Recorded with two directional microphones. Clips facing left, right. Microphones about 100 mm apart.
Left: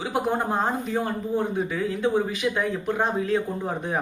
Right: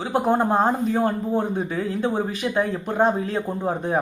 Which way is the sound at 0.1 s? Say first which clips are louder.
Right 6 dB; 35° right (ahead or behind).